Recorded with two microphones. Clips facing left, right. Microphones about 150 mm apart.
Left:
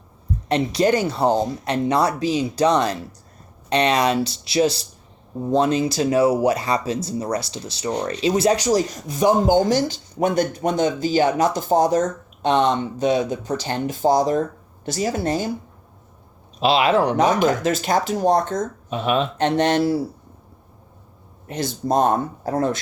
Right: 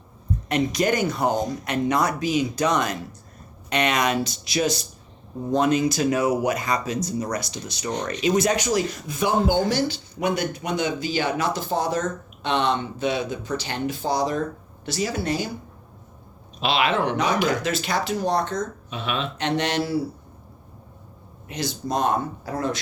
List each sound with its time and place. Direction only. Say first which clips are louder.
0.4 s speech: left 4 dB; 30° left (ahead or behind); by 15.4 s 45° left (ahead or behind)
16.6 s speech: left 5 dB; 30° left (ahead or behind); by 19.8 s 50° left (ahead or behind)
21.4 s speech: left 4 dB; 50° left (ahead or behind)